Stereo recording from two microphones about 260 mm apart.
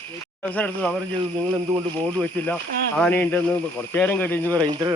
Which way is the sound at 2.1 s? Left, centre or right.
Centre.